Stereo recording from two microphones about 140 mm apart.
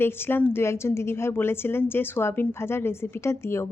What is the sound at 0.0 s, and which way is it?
A woman's voice, 15° left (ahead or behind).